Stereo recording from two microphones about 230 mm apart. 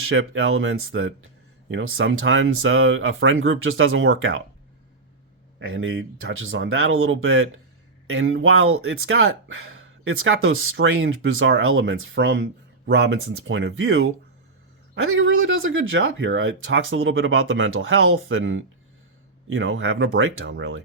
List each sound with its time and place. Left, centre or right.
0.1 s speech: right
5.5 s speech: right